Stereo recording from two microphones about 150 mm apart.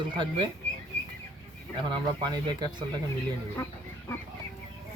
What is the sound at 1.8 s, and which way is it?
Speech, 30° right (ahead or behind).